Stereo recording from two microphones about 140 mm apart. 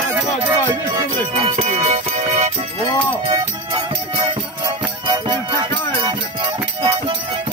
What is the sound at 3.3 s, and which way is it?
Music, 30° right (ahead or behind).